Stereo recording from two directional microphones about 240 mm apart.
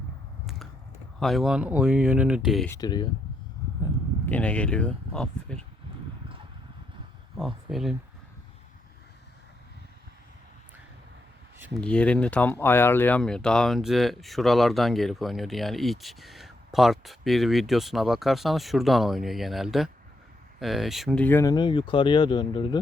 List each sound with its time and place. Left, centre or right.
1.2 s speech: centre
2.6 s speech: centre
4.3 s speech: centre
7.3 s speech: centre
11.6 s speech: centre